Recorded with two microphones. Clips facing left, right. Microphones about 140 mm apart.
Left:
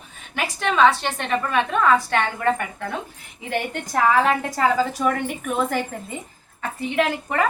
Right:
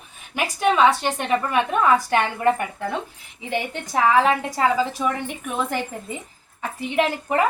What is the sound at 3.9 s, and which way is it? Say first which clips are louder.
Speech: right 1 dB; 10° right (ahead or behind).